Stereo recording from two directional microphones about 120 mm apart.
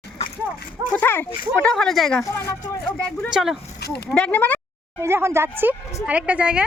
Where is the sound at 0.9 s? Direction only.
15° left (ahead or behind).